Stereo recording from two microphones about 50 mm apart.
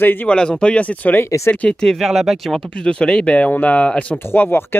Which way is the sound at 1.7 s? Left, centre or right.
Centre.